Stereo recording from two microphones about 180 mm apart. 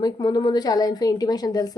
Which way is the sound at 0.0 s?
25° left (ahead or behind).